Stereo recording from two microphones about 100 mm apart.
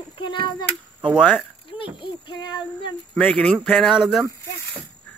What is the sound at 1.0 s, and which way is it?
Speech, centre (ahead or behind).